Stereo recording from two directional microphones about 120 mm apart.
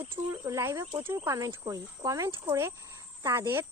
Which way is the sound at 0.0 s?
25° right (ahead or behind).